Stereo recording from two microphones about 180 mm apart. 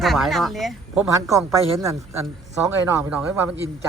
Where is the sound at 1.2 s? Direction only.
15° right (ahead or behind).